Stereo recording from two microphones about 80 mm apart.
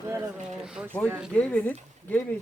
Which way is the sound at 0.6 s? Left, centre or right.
Centre.